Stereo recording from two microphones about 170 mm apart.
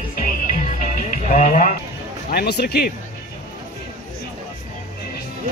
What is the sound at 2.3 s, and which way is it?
Speech, 75° left (ahead or behind).